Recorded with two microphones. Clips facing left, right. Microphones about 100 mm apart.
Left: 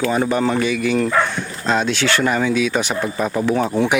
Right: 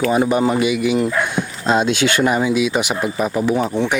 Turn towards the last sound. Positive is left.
turn(degrees=5)  # may be behind; listen again after turning